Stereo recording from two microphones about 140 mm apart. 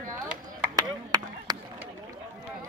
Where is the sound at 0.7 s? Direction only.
30° right (ahead or behind).